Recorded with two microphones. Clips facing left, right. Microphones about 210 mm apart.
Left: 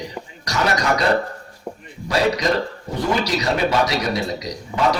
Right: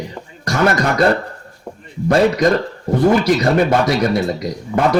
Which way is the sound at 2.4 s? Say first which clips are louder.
Right 6 dB; 55° right (ahead or behind).